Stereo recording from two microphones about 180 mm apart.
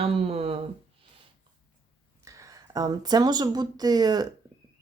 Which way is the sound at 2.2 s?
20° right (ahead or behind).